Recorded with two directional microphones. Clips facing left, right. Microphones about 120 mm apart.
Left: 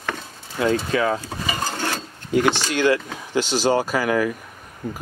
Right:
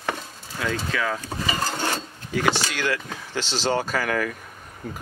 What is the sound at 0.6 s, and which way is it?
Speech, 25° left (ahead or behind).